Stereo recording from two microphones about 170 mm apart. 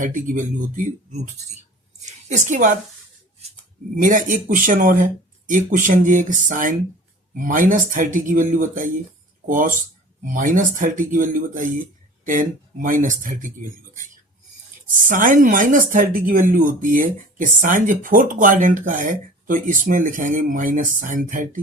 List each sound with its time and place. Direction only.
0.0 s speech: 50° right (ahead or behind)
2.0 s speech: 45° right (ahead or behind)
3.9 s speech: 50° right (ahead or behind)
15.0 s speech: 50° right (ahead or behind)